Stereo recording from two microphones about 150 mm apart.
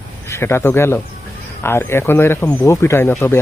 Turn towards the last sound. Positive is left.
turn(degrees=15)  # may be behind; listen again after turning